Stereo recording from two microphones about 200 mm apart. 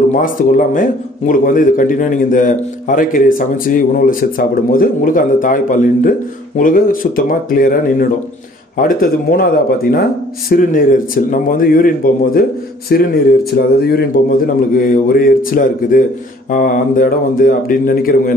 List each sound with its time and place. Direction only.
0.1 s speech: 45° left (ahead or behind)